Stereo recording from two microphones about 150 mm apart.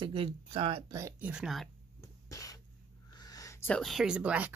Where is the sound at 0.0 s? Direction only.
35° right (ahead or behind).